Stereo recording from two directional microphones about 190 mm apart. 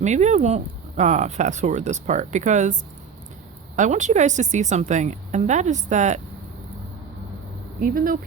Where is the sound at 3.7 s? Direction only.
40° right (ahead or behind).